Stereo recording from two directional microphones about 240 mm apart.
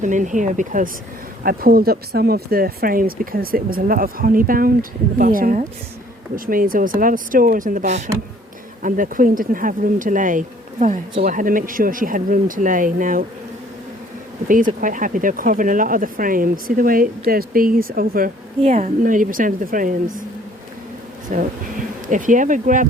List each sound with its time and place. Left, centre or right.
0.0 s speech: right
14.4 s speech: right
21.3 s speech: right